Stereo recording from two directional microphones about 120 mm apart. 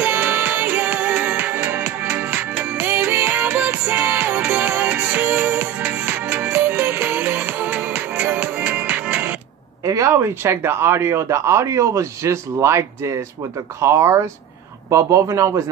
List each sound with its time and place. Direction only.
0.0 s music: 15° right (ahead or behind)
9.8 s speech: 25° right (ahead or behind)